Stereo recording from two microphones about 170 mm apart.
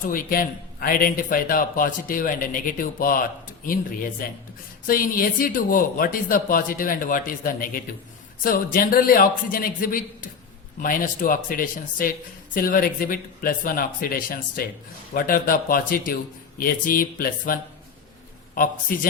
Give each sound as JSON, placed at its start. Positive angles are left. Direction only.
{"t": 0.0, "sound": "a man's voice", "side_deg": 55}
{"t": 4.9, "sound": "a man's voice", "side_deg": 55}